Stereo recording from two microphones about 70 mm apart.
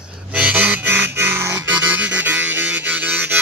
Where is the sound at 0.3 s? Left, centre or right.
Right.